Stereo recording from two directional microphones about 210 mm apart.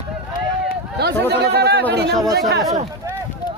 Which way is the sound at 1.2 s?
50° right (ahead or behind).